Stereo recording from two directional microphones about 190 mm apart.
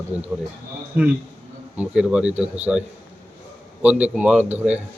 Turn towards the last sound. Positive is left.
turn(degrees=-5)  # may be behind; listen again after turning